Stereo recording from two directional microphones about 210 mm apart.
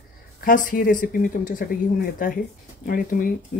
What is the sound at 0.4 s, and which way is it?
Speech, 40° left (ahead or behind).